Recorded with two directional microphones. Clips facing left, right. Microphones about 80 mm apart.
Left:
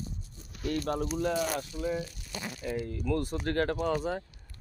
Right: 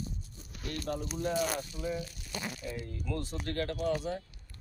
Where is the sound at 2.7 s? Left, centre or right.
Left.